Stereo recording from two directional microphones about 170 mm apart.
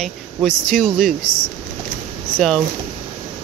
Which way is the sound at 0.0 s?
Centre (ahead or behind).